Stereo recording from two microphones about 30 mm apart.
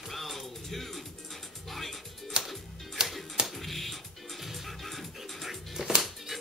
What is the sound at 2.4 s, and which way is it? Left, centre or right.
Music, right.